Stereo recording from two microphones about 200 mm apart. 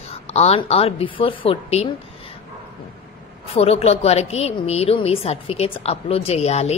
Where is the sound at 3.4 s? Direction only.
30° left (ahead or behind).